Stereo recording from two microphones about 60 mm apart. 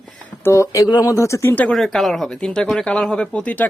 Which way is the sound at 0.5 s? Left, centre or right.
Left.